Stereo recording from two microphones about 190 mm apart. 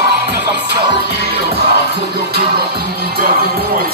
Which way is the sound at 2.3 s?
55° right (ahead or behind).